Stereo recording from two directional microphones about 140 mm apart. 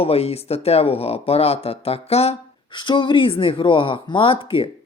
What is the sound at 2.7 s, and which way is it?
Speech, 35° left (ahead or behind).